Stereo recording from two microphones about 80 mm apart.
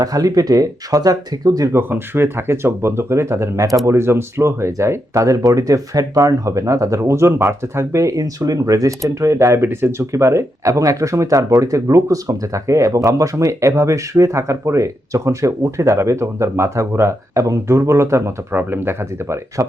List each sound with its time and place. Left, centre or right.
0.0 s speech: right
1.7 s speech: right
18.5 s speech: right